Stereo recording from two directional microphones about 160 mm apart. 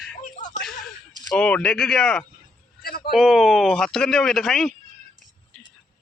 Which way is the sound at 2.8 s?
70° left (ahead or behind).